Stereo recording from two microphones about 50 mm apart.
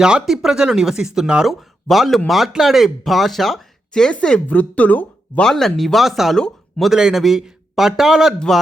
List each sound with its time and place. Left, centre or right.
0.0 s speech: centre
3.9 s speech: centre
4.4 s speech: left
5.4 s speech: centre
6.9 s speech: centre